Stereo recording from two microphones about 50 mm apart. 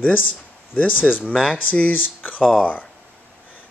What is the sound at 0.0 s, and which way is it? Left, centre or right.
Speech, left.